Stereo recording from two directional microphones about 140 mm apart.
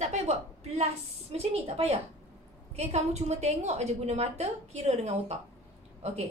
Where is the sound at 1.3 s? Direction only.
45° right (ahead or behind).